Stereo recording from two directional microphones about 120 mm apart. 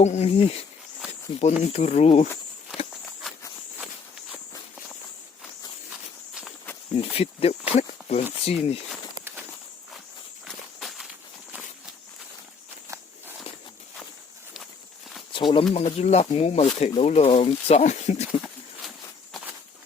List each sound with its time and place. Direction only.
0.0 s speech: 75° left (ahead or behind)
0.3 s speech: 50° left (ahead or behind)
1.6 s speech: 65° left (ahead or behind)
6.9 s speech: 55° left (ahead or behind)
10.4 s walk: centre (ahead or behind)
15.3 s speech: 45° left (ahead or behind)
15.7 s speech: 65° left (ahead or behind)